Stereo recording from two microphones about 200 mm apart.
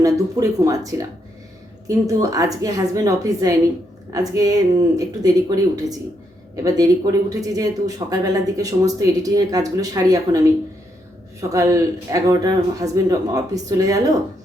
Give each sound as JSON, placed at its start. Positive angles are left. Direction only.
{"t": 0.0, "sound": "speech", "side_deg": -15}